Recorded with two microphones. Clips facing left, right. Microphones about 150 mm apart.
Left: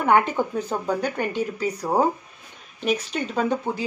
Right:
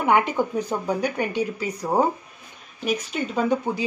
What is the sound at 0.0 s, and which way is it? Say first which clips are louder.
Speech: left 1 dB; 15° right (ahead or behind).